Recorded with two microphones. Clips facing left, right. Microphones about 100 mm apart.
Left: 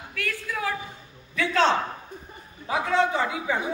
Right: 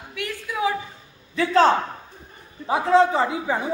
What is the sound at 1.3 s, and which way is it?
Speech, 30° right (ahead or behind).